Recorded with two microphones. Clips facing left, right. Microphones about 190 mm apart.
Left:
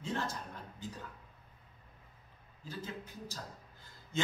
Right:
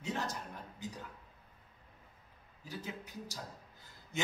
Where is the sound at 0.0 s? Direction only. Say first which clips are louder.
Left 1 dB; 15° right (ahead or behind).